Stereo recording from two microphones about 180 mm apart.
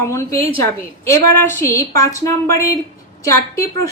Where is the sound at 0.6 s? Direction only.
15° left (ahead or behind).